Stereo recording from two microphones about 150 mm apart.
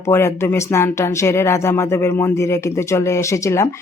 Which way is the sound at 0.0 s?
20° left (ahead or behind).